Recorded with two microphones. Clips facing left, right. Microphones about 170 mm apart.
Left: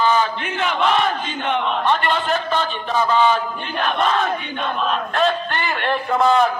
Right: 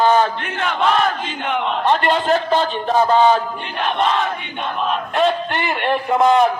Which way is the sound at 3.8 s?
20° right (ahead or behind).